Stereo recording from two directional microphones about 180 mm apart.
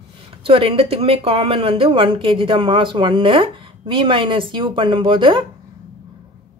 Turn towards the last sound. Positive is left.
turn(degrees=-25)  # may be behind; listen again after turning